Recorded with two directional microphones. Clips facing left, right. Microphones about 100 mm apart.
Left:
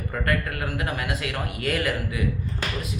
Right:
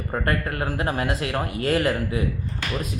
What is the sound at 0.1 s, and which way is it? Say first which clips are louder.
Speech: right 2 dB; 30° right (ahead or behind).